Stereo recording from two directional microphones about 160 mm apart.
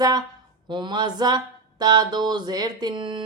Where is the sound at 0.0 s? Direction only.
25° right (ahead or behind).